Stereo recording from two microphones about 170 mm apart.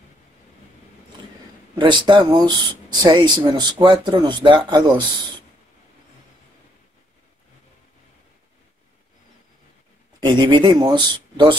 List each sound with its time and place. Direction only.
1.8 s speech: 25° right (ahead or behind)
10.2 s speech: 25° right (ahead or behind)